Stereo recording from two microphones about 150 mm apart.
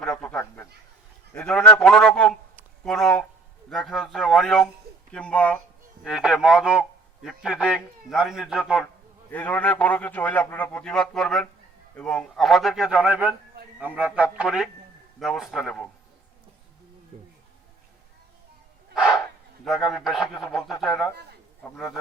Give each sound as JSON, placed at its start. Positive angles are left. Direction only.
{"t": 0.0, "sound": "a sound", "side_deg": 5}
{"t": 1.3, "sound": "a man's voice", "side_deg": 5}
{"t": 6.0, "sound": "a man's voice", "side_deg": -5}
{"t": 9.3, "sound": "a man's voice", "side_deg": 10}
{"t": 17.1, "sound": "speech", "side_deg": -55}
{"t": 19.6, "sound": "a man's voice", "side_deg": 0}
{"t": 21.6, "sound": "a man's voice", "side_deg": 15}